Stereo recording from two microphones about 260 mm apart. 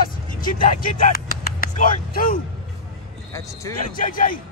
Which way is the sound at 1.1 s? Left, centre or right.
Left.